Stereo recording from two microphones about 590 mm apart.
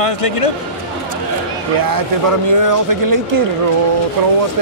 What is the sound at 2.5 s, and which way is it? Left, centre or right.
Speech, right.